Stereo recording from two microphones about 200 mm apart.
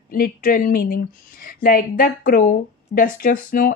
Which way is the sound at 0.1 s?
45° left (ahead or behind).